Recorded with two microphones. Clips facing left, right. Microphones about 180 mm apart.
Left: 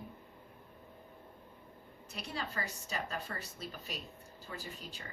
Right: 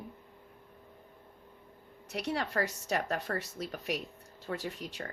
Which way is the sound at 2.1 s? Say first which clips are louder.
Right 8 dB; 70° right (ahead or behind).